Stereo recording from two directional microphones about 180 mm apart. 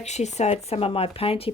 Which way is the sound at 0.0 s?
40° left (ahead or behind).